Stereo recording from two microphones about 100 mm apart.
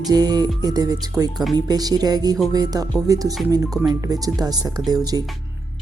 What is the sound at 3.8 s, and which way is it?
Speech, 40° right (ahead or behind).